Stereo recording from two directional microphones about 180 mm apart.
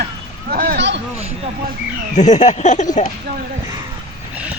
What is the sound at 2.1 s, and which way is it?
Speech, 40° left (ahead or behind).